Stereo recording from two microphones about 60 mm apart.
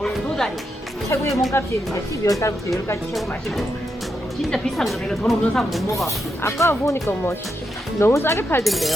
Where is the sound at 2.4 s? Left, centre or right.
Left.